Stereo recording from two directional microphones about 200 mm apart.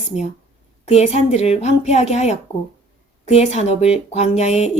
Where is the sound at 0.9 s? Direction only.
30° left (ahead or behind).